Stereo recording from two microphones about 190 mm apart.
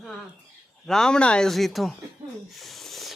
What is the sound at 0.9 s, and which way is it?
Speech, 5° left (ahead or behind).